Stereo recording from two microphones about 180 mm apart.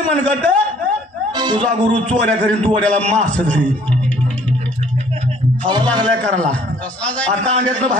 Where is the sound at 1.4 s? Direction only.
25° right (ahead or behind).